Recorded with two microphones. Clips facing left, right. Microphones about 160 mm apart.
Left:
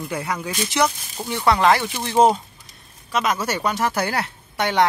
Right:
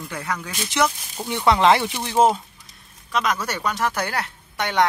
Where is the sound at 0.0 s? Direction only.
10° left (ahead or behind).